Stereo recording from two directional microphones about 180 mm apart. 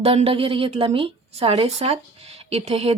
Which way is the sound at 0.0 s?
35° right (ahead or behind).